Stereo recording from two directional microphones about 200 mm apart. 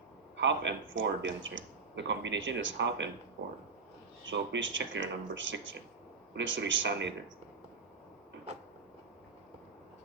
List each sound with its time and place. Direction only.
0.3 s speech: 65° right (ahead or behind)
4.3 s speech: 70° right (ahead or behind)